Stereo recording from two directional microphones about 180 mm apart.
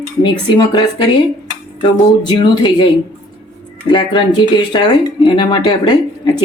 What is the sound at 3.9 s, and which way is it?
Speech, 25° left (ahead or behind).